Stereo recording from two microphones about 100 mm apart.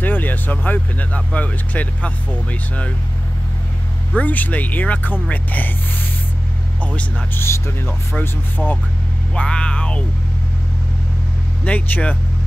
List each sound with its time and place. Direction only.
0.0 s speech: 20° left (ahead or behind)
4.1 s speech: 15° left (ahead or behind)
6.8 s speech: 10° left (ahead or behind)
7.3 s speech: 25° left (ahead or behind)
9.3 s speech: 10° left (ahead or behind)
11.6 s speech: 15° left (ahead or behind)